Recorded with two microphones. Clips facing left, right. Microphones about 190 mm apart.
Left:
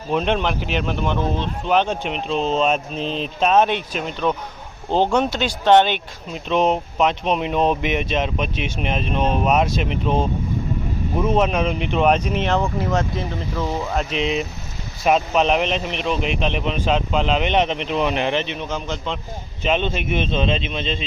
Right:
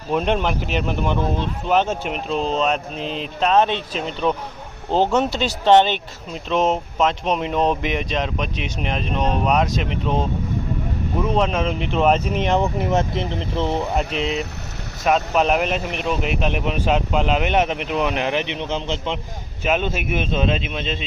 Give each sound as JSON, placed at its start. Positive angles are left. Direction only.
{"t": 0.1, "sound": "a man's voice", "side_deg": -10}
{"t": 2.6, "sound": "speech", "side_deg": 20}
{"t": 3.0, "sound": "a man's voice", "side_deg": -15}
{"t": 3.4, "sound": "speech", "side_deg": 15}
{"t": 3.9, "sound": "speech", "side_deg": 5}
{"t": 6.5, "sound": "speech", "side_deg": 15}
{"t": 7.5, "sound": "speech", "side_deg": 0}
{"t": 7.8, "sound": "speech", "side_deg": 20}
{"t": 11.7, "sound": "speech", "side_deg": 5}
{"t": 12.4, "sound": "speech", "side_deg": -20}
{"t": 14.2, "sound": "speech", "side_deg": 15}
{"t": 15.3, "sound": "a man's voice", "side_deg": -5}
{"t": 18.4, "sound": "speech", "side_deg": -20}
{"t": 19.6, "sound": "a man's voice", "side_deg": -5}